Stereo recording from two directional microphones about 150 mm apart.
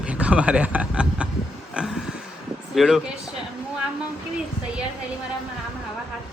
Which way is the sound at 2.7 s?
Centre (ahead or behind).